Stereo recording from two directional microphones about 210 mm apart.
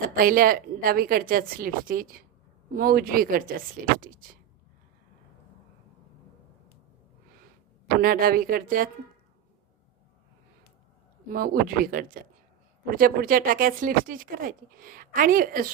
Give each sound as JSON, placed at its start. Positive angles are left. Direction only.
{"t": 0.2, "sound": "a woman's voice", "side_deg": -40}
{"t": 8.0, "sound": "a woman's voice", "side_deg": -45}
{"t": 11.3, "sound": "a woman's voice", "side_deg": -45}